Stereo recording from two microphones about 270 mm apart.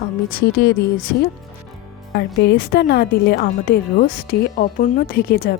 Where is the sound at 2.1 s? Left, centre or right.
Left.